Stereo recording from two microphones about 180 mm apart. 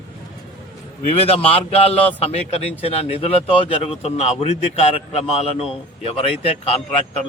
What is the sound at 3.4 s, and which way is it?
A man's voice, 30° left (ahead or behind).